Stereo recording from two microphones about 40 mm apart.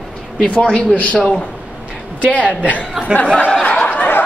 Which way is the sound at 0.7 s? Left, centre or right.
Left.